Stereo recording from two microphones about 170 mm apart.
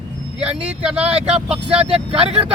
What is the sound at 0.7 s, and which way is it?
Speech, 5° right (ahead or behind).